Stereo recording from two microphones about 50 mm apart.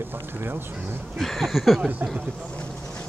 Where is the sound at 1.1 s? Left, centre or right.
Centre.